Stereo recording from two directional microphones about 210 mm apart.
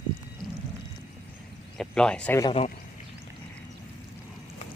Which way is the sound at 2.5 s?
30° left (ahead or behind).